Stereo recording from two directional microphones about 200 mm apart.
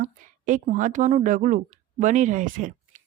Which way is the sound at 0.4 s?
40° right (ahead or behind).